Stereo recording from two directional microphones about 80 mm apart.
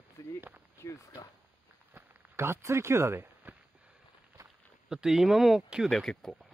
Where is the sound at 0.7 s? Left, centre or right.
Left.